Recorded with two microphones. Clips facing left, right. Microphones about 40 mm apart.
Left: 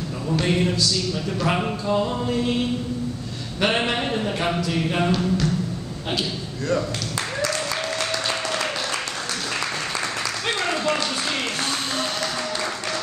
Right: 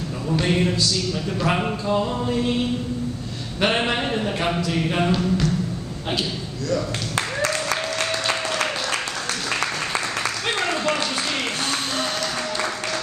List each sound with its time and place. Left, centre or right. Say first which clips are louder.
0.3 s speech: right 1 dB; centre
3.6 s speech: right 1 dB; centre
8.0 s applause: right 1 dB; centre
8.6 s applause: right 1 dB; centre
10.7 s a sound: left 1 dB; centre
12.4 s applause: right 1 dB; centre